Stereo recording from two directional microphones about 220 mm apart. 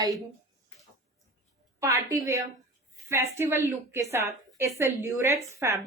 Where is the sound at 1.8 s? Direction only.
15° right (ahead or behind).